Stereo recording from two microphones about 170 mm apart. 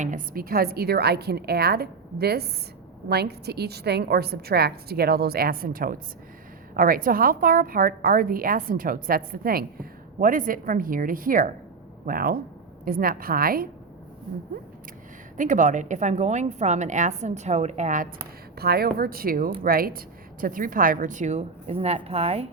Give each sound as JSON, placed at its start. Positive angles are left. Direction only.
{"t": 0.0, "sound": "a woman's voice", "side_deg": -55}
{"t": 15.4, "sound": "a woman's voice", "side_deg": -50}
{"t": 18.5, "sound": "a woman's voice", "side_deg": -65}